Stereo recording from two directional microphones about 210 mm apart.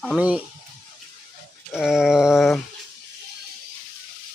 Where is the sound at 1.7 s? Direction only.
5° right (ahead or behind).